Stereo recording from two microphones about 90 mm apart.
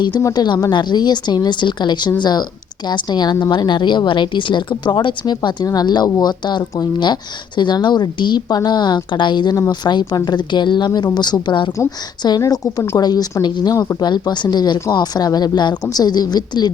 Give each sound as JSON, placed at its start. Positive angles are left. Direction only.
{"t": 0.3, "sound": "a woman's voice", "side_deg": 55}
{"t": 12.4, "sound": "a woman's voice", "side_deg": 45}